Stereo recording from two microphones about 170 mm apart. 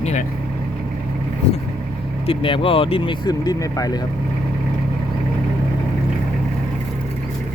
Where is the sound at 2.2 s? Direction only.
30° left (ahead or behind).